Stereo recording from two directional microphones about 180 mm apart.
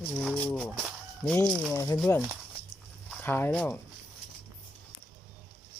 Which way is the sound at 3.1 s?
10° left (ahead or behind).